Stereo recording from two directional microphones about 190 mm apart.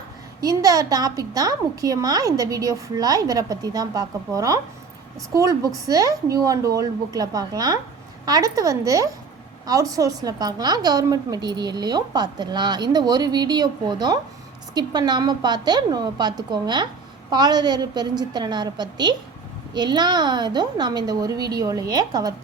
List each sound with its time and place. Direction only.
0.4 s a woman's voice: 20° right (ahead or behind)